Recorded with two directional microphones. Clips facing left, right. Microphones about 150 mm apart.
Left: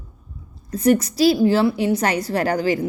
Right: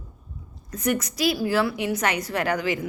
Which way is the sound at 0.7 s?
30° left (ahead or behind).